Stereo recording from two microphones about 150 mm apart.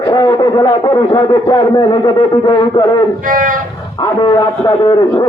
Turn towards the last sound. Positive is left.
turn(degrees=30)  # may be behind; listen again after turning